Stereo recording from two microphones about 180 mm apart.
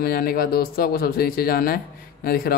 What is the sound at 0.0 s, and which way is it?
Speech, 55° left (ahead or behind).